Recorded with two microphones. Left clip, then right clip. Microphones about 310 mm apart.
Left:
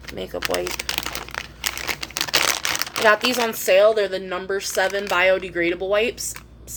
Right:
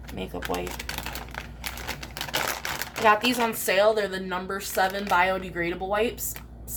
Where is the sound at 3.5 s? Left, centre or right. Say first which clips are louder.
Left 8 dB; centre.